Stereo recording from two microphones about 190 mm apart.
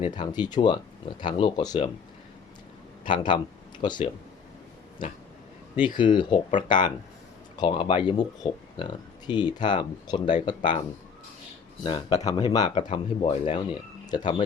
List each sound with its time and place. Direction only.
0.0 s speech: 25° left (ahead or behind)
3.1 s speech: 25° left (ahead or behind)
6.0 s speech: 25° left (ahead or behind)
11.8 s speech: 25° left (ahead or behind)